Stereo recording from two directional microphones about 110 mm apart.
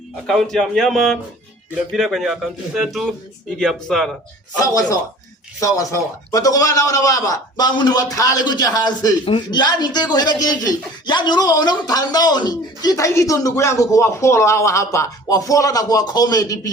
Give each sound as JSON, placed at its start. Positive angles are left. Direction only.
{"t": 0.3, "sound": "speech", "side_deg": 0}
{"t": 4.5, "sound": "speech", "side_deg": 35}